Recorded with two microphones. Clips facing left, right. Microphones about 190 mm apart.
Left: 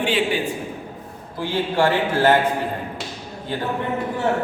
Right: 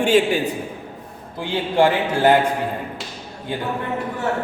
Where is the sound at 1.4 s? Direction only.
15° right (ahead or behind).